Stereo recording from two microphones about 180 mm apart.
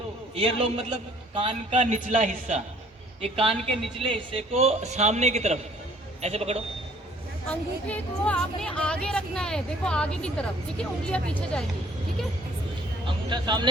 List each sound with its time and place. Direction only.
0.3 s a man's voice: 35° right (ahead or behind)
7.4 s speech: 5° left (ahead or behind)
13.1 s speech: 25° right (ahead or behind)